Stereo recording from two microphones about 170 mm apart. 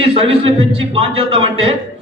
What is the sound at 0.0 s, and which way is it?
A man's voice, 35° right (ahead or behind).